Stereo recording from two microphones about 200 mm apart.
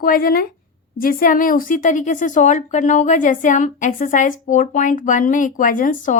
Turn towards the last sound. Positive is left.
turn(degrees=40)  # may be behind; listen again after turning